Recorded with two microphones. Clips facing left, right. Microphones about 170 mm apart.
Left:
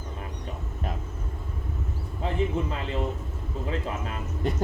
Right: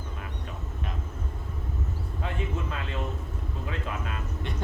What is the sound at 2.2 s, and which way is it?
A man's voice, 30° left (ahead or behind).